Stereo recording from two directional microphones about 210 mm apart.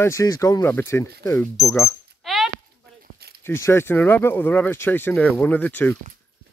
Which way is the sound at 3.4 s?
10° left (ahead or behind).